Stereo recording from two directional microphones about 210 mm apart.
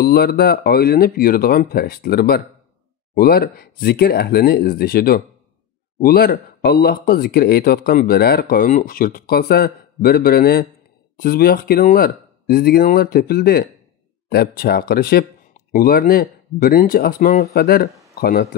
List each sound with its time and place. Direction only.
0.0 s speech: 45° left (ahead or behind)